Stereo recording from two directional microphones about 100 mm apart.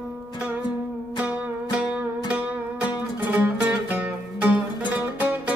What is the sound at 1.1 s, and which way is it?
Music, 10° right (ahead or behind).